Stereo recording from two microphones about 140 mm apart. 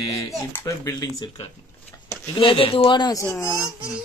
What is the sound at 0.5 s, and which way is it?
Speech, 25° left (ahead or behind).